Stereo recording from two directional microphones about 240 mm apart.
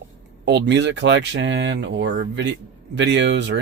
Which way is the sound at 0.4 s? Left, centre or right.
Right.